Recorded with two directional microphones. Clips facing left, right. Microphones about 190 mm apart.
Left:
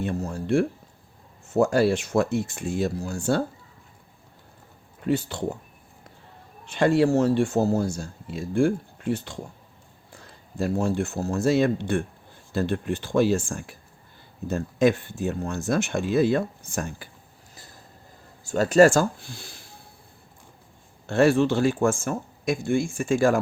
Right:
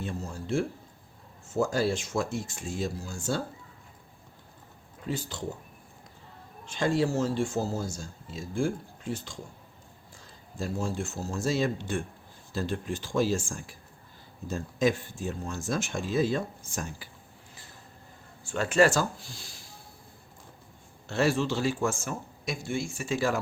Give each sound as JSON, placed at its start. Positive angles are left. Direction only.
{"t": 0.0, "sound": "speech", "side_deg": 60}
{"t": 5.0, "sound": "speech", "side_deg": 65}
{"t": 6.7, "sound": "speech", "side_deg": 65}
{"t": 18.4, "sound": "speech", "side_deg": 40}
{"t": 21.1, "sound": "speech", "side_deg": 55}